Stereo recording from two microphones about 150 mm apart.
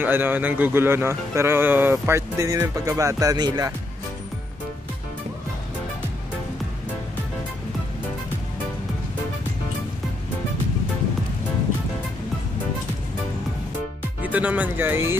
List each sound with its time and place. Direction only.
0.0 s speech: 15° right (ahead or behind)
14.2 s speech: 10° right (ahead or behind)